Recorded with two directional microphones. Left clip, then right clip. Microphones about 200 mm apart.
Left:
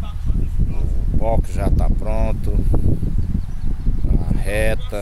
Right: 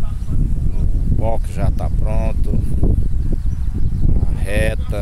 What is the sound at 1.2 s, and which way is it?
Speech, centre (ahead or behind).